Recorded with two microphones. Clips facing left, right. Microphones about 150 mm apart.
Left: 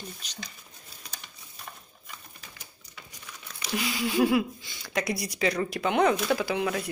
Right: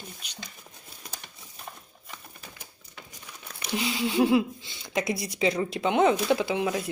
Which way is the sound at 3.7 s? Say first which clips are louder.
Right 1 dB; 30° right (ahead or behind).